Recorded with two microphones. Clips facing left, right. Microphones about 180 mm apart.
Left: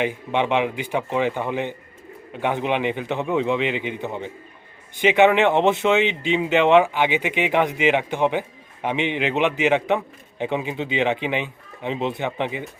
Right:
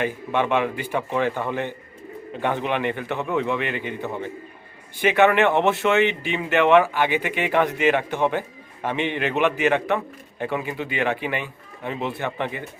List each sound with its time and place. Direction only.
0.0 s speech: 15° left (ahead or behind)